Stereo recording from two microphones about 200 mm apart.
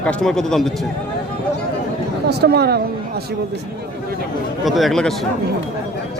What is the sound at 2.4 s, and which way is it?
Speech, 55° right (ahead or behind).